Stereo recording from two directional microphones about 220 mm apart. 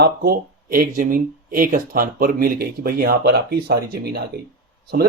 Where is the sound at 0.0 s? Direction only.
45° right (ahead or behind).